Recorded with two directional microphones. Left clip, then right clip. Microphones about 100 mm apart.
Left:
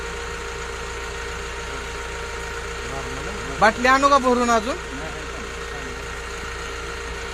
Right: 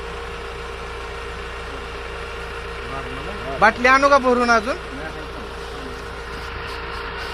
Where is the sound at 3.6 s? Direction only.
30° left (ahead or behind).